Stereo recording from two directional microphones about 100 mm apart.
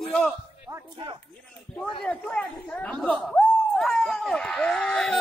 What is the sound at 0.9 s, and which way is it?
Speech, 55° right (ahead or behind).